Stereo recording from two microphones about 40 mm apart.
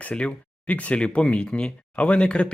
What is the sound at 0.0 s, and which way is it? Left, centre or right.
Speech, left.